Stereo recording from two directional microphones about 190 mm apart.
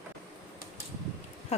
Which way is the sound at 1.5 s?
30° left (ahead or behind).